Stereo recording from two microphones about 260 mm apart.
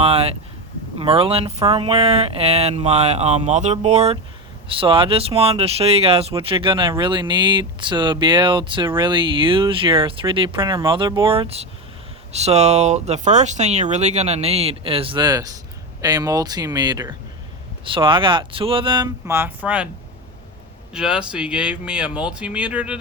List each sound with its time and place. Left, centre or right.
0.0 s a sound: right
0.9 s speech: right; by 19.9 s centre
20.9 s speech: centre